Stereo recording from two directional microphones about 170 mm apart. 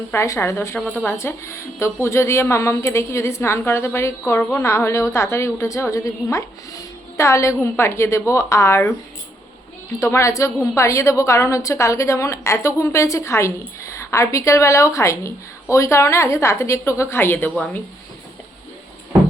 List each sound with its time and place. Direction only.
0.1 s a woman's voice: 15° left (ahead or behind)
10.0 s a woman's voice: 15° left (ahead or behind)